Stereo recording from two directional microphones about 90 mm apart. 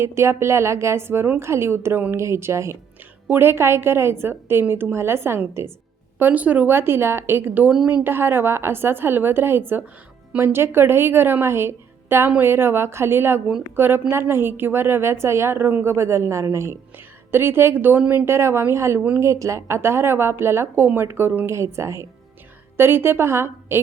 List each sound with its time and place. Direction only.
0.0 s a woman's voice: 30° right (ahead or behind)
7.7 s a woman's voice: 10° right (ahead or behind)
8.0 s a woman's voice: 25° right (ahead or behind)
18.3 s a woman's voice: 30° right (ahead or behind)